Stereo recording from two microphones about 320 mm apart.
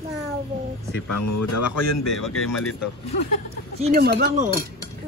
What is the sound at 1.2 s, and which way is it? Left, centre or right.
Speech, left.